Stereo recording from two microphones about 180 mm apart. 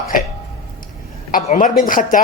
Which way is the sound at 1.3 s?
45° left (ahead or behind).